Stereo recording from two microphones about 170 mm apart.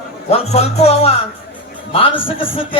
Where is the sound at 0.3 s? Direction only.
40° left (ahead or behind).